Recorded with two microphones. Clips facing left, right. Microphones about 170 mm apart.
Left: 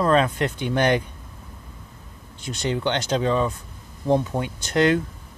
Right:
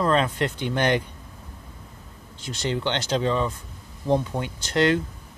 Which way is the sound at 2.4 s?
20° left (ahead or behind).